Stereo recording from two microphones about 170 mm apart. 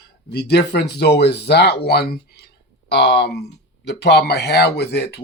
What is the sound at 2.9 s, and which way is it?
Speech, 90° left.